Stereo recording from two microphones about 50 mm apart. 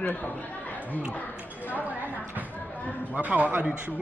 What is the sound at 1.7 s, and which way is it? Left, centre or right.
Speech, right.